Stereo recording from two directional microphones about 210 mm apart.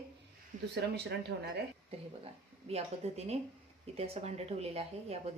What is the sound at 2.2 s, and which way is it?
Speech, 30° right (ahead or behind).